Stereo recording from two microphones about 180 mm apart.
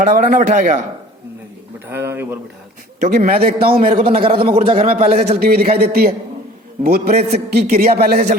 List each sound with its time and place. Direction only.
0.0 s a man's voice: 45° right (ahead or behind)
1.9 s a man's voice: 15° right (ahead or behind)
3.0 s a man's voice: 45° right (ahead or behind)
3.9 s a man's voice: 35° right (ahead or behind)
5.4 s a man's voice: 55° right (ahead or behind)